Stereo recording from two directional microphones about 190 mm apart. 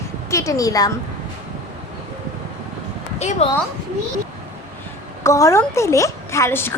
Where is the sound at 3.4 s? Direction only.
35° left (ahead or behind).